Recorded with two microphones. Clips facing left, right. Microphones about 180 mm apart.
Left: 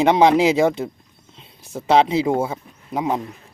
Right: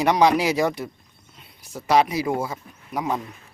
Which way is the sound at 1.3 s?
25° left (ahead or behind).